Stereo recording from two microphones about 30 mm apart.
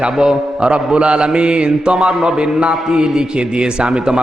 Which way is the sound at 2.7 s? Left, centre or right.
Right.